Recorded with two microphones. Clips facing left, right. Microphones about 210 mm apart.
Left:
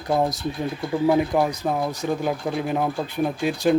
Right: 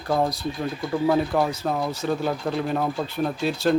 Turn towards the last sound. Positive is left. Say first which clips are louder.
# left 2 dB
turn(degrees=15)  # may be behind; listen again after turning